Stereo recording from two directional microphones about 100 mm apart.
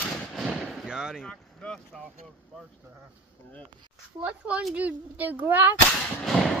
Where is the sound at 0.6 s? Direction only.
5° right (ahead or behind).